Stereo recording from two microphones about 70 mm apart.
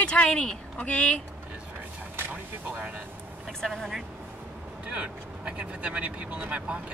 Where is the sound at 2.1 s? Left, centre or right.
Right.